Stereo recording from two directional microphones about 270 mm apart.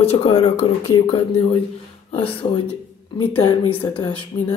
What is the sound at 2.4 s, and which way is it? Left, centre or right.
Speech, left.